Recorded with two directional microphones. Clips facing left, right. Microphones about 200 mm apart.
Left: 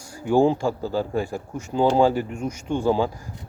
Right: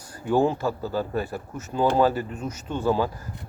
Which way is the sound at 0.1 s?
10° left (ahead or behind).